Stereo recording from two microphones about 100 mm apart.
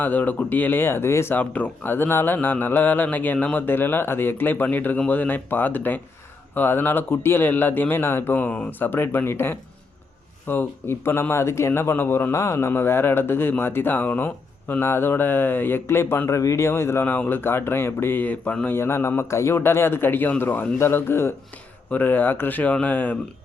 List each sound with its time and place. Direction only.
0.0 s speech: 20° left (ahead or behind)